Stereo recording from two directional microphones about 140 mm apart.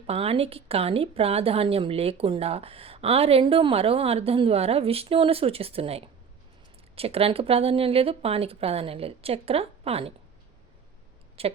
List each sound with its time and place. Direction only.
0.1 s a woman's voice: 45° right (ahead or behind)
11.4 s a woman's voice: 45° right (ahead or behind)